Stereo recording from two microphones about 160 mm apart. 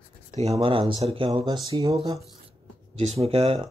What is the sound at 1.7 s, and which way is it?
Speech, 25° right (ahead or behind).